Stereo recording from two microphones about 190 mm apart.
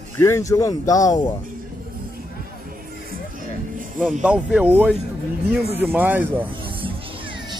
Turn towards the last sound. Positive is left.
turn(degrees=-25)  # may be behind; listen again after turning